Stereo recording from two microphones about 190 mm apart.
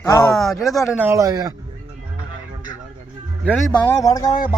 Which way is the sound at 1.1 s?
15° right (ahead or behind).